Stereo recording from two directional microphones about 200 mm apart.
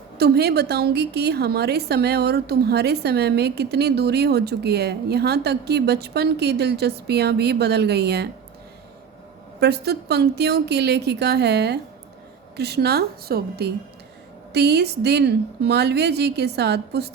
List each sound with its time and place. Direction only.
0.2 s a woman's voice: 55° right (ahead or behind)
9.6 s a woman's voice: 55° right (ahead or behind)